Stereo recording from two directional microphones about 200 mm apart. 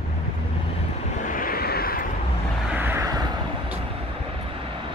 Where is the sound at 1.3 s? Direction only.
45° left (ahead or behind).